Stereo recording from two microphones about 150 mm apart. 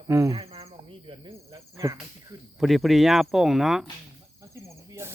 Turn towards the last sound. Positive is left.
turn(degrees=-15)  # may be behind; listen again after turning